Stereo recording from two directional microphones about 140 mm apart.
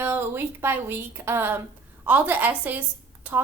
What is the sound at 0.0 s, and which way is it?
A woman's voice, 15° right (ahead or behind).